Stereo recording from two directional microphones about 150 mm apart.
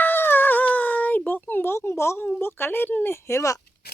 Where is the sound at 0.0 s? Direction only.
15° left (ahead or behind).